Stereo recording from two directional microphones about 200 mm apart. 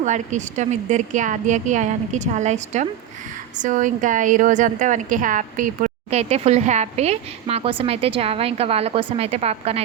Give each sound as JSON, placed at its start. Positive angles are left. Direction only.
{"t": 0.0, "sound": "a woman's voice", "side_deg": -35}